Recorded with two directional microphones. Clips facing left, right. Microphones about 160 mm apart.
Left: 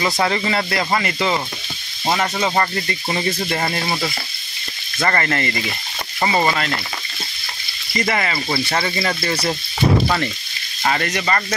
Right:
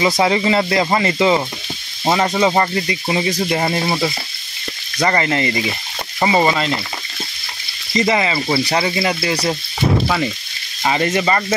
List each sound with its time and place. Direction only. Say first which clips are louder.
0.0 s speech: right 4 dB; 15° right (ahead or behind)
7.9 s speech: right 4 dB; 20° right (ahead or behind); by 10.3 s centre (ahead or behind)
10.8 s speech: right 4 dB; 15° right (ahead or behind)